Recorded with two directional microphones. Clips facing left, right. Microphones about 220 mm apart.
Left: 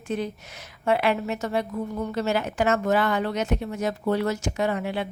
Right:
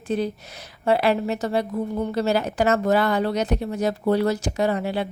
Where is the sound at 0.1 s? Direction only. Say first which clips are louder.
Right 4 dB; 35° right (ahead or behind).